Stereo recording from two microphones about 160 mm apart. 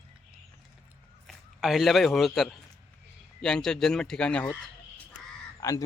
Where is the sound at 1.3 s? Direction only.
Centre (ahead or behind).